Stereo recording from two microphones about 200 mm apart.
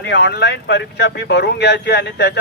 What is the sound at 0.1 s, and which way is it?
Speech, 60° left (ahead or behind).